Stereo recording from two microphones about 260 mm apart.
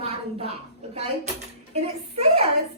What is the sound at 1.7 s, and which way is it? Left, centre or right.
Speech, right.